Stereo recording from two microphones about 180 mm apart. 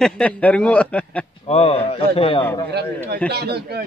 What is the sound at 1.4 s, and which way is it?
Speech, 35° left (ahead or behind).